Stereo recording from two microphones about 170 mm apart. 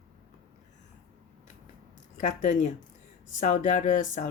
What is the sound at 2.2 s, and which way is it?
Speech, 45° left (ahead or behind).